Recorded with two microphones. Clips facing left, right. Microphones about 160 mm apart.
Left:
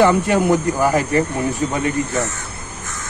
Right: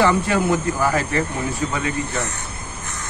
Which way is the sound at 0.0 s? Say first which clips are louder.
Left 3 dB; 15° left (ahead or behind).